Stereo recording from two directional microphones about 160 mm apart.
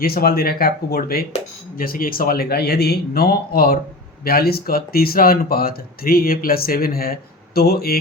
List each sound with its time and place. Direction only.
0.0 s speech: 70° left (ahead or behind)